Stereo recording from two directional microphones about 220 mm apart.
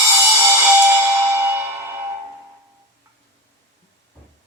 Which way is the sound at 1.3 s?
15° right (ahead or behind).